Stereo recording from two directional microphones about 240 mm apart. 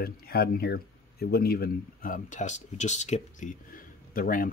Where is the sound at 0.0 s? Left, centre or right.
Left.